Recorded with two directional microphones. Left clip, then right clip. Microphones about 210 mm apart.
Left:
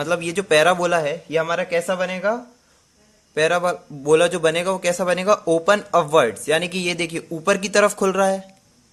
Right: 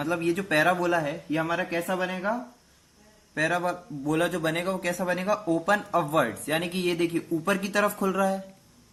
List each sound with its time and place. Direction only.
0.0 s a man's voice: 45° left (ahead or behind)
3.3 s a man's voice: 50° left (ahead or behind)